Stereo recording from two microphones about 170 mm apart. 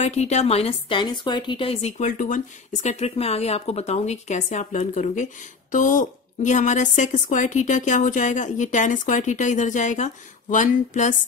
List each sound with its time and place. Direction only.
0.0 s speech: 40° left (ahead or behind)